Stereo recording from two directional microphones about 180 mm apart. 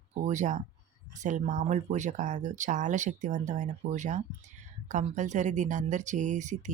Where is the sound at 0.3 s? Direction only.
40° right (ahead or behind).